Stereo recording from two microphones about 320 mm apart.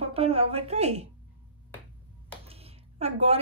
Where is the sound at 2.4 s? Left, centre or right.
Centre.